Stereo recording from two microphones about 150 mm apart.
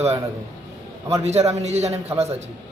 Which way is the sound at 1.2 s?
45° right (ahead or behind).